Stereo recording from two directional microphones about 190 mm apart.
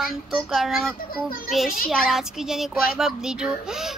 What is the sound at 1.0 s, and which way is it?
Speech, 50° left (ahead or behind).